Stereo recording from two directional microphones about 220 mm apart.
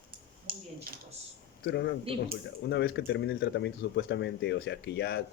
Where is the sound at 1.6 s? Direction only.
50° left (ahead or behind).